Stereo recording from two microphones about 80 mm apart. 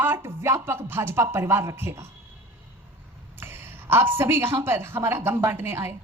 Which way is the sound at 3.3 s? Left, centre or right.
Right.